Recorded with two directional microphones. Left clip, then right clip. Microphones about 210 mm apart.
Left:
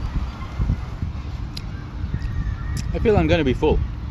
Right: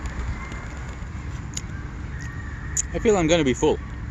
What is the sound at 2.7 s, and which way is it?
Speech, centre (ahead or behind).